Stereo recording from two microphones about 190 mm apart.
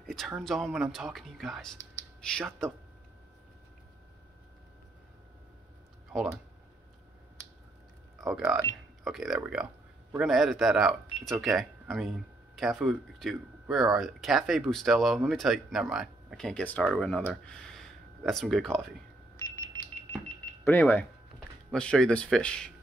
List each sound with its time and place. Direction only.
0.0 s a sound: centre (ahead or behind)
0.4 s speech: centre (ahead or behind)
6.1 s speech: centre (ahead or behind)
8.2 s speech: centre (ahead or behind)
19.3 s a sound: 15° left (ahead or behind)
20.6 s speech: 10° left (ahead or behind)